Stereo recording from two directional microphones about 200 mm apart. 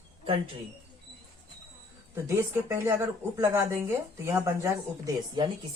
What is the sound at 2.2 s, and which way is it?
Speech, 15° right (ahead or behind).